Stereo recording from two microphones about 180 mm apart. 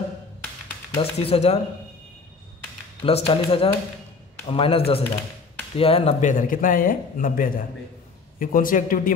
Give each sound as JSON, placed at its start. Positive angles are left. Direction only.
{"t": 0.9, "sound": "speech", "side_deg": 35}
{"t": 3.0, "sound": "speech", "side_deg": 35}